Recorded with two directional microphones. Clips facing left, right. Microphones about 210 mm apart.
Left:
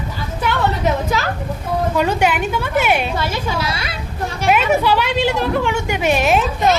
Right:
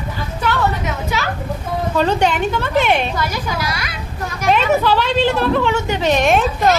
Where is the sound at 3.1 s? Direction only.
25° left (ahead or behind).